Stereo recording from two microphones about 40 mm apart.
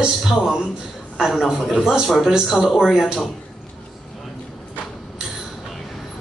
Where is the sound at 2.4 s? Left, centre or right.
Centre.